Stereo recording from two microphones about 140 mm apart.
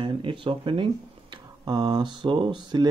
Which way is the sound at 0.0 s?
40° right (ahead or behind).